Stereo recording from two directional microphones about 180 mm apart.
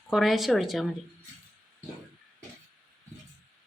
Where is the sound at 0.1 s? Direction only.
Centre (ahead or behind).